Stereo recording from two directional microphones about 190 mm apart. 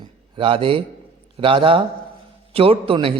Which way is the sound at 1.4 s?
25° right (ahead or behind).